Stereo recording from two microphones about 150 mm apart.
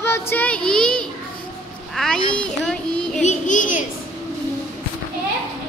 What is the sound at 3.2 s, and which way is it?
Child singing, 55° left (ahead or behind).